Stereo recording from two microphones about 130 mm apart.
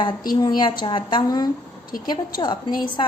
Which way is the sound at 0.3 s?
30° left (ahead or behind).